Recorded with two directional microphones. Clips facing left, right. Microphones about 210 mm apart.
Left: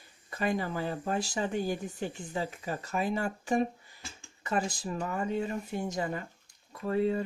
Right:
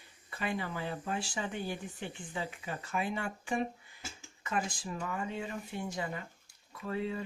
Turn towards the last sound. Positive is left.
turn(degrees=40)  # may be behind; listen again after turning